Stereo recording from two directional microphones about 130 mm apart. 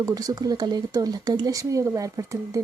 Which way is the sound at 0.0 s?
30° right (ahead or behind).